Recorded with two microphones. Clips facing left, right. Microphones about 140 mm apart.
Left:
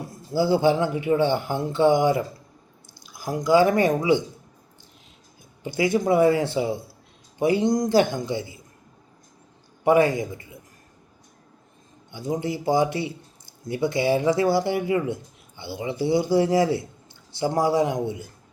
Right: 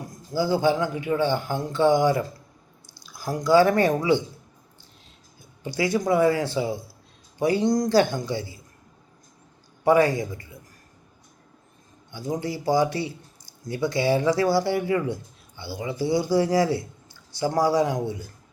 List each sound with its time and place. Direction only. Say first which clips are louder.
0.3 s speech: left 2 dB; 25° left (ahead or behind)
5.6 s speech: left 2 dB; 20° left (ahead or behind)
9.8 s speech: left 1 dB; 20° left (ahead or behind)
12.3 s speech: left 1 dB; 20° left (ahead or behind)